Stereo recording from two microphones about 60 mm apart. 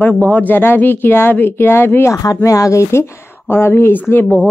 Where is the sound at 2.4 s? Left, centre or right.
Left.